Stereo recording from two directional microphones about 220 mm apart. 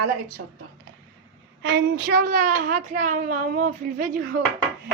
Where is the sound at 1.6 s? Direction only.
50° right (ahead or behind).